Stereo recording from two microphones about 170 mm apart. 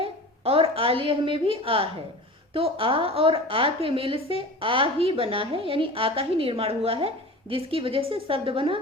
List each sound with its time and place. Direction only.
0.0 s a woman's voice: 35° right (ahead or behind)